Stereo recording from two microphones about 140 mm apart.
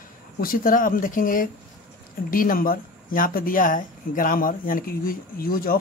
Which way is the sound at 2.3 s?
90° left.